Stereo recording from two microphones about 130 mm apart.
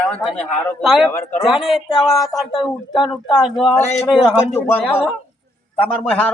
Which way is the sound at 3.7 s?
20° left (ahead or behind).